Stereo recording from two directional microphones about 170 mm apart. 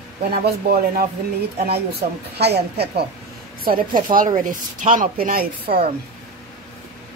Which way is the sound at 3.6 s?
55° right (ahead or behind).